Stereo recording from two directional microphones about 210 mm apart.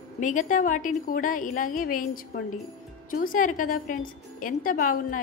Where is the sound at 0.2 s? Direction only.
35° left (ahead or behind).